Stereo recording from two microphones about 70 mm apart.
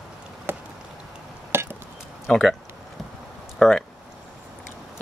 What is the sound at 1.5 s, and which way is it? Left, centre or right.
Chop, right.